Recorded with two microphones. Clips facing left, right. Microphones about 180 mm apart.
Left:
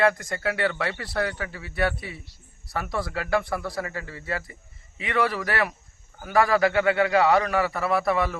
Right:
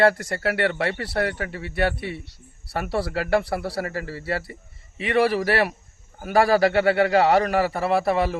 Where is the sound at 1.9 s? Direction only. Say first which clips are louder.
Right 6 dB; 65° right (ahead or behind).